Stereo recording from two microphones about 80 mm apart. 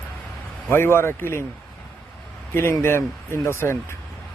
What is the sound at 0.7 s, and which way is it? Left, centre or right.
Speech, left.